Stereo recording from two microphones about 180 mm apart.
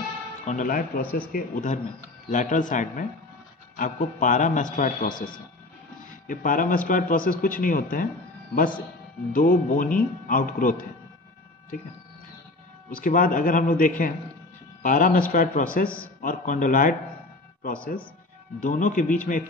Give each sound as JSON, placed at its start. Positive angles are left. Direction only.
{"t": 0.5, "sound": "speech", "side_deg": 45}
{"t": 6.2, "sound": "speech", "side_deg": 50}
{"t": 9.3, "sound": "speech", "side_deg": 50}
{"t": 13.0, "sound": "speech", "side_deg": 50}
{"t": 18.6, "sound": "speech", "side_deg": 45}